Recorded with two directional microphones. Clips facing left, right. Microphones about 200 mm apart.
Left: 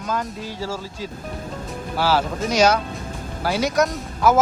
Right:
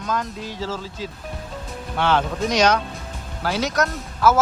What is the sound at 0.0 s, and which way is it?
Speech, 10° left (ahead or behind).